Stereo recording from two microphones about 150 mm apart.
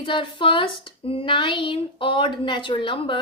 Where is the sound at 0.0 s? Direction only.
30° left (ahead or behind).